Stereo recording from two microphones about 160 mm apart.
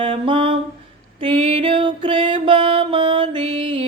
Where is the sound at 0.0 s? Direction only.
30° right (ahead or behind).